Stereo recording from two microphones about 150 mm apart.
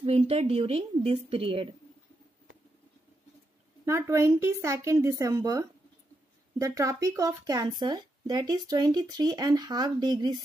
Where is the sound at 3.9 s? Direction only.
20° right (ahead or behind).